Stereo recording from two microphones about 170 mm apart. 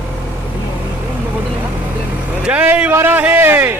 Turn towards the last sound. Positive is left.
turn(degrees=-10)  # may be behind; listen again after turning